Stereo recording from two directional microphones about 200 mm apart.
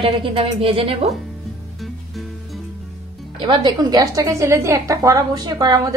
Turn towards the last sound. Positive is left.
turn(degrees=-20)  # may be behind; listen again after turning